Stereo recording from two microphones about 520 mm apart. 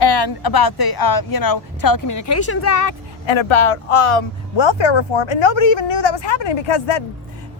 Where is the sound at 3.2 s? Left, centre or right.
Left.